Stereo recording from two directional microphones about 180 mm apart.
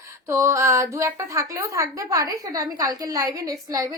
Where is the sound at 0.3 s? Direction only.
15° right (ahead or behind).